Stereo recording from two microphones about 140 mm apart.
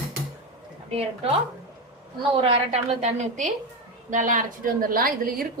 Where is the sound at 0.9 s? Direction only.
40° right (ahead or behind); by 5.5 s 90° right.